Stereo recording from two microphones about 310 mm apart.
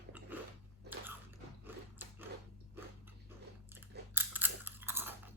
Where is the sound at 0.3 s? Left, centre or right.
Centre.